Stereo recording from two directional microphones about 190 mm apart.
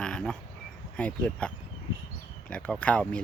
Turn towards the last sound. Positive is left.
turn(degrees=5)  # may be behind; listen again after turning